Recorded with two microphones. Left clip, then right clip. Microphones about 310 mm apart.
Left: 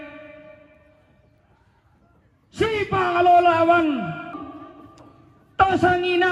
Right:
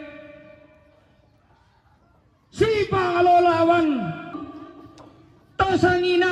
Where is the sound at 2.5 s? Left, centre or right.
Left.